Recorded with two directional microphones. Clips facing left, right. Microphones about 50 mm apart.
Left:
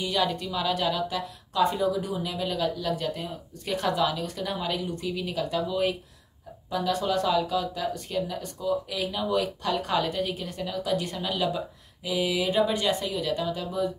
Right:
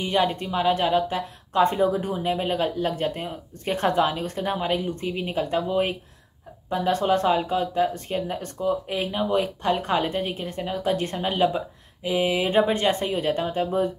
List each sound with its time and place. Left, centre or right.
0.0 s speech: right